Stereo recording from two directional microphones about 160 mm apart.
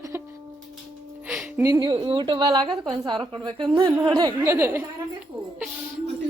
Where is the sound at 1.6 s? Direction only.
25° right (ahead or behind).